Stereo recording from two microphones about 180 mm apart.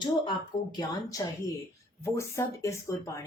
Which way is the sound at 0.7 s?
20° left (ahead or behind).